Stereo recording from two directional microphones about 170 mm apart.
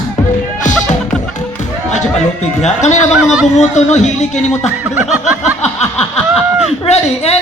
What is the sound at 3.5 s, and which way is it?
Speech, 45° left (ahead or behind).